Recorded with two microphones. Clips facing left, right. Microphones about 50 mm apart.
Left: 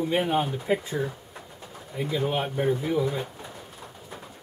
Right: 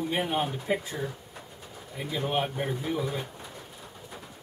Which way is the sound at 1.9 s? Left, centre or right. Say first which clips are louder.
Left 3 dB; centre.